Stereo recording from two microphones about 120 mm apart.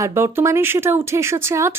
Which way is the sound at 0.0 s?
25° right (ahead or behind).